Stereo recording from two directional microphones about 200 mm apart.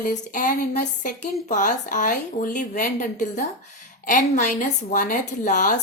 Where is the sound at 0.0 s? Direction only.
40° left (ahead or behind).